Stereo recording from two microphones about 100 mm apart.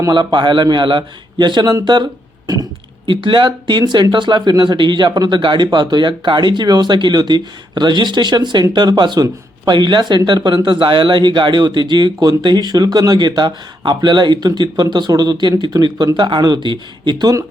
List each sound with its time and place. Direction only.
0.1 s speech: 50° right (ahead or behind)
3.1 s speech: 55° right (ahead or behind)